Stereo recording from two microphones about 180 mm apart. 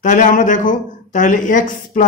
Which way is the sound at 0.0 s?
45° left (ahead or behind).